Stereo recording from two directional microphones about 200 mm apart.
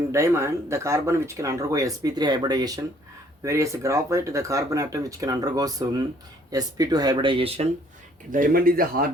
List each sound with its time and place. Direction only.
0.1 s speech: 15° right (ahead or behind); by 7.7 s 30° right (ahead or behind)
8.3 s speech: 45° right (ahead or behind)